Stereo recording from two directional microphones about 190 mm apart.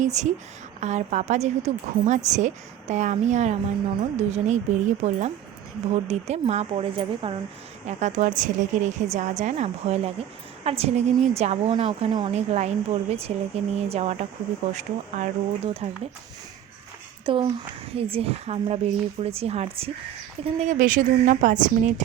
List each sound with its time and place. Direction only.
0.0 s speech: 40° right (ahead or behind)
17.2 s a child's voice: 25° right (ahead or behind)